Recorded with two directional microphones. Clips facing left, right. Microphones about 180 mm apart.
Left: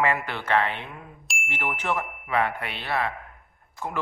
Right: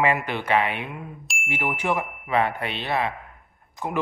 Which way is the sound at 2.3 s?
25° right (ahead or behind).